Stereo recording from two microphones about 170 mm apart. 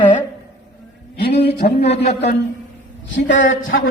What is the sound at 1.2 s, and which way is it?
Speech, 70° left (ahead or behind).